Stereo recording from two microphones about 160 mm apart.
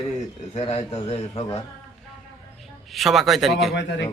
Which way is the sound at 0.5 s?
40° left (ahead or behind).